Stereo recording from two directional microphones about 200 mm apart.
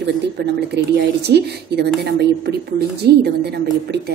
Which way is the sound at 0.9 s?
55° right (ahead or behind).